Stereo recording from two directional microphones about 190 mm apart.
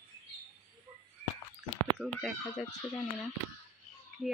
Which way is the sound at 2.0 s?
Centre (ahead or behind).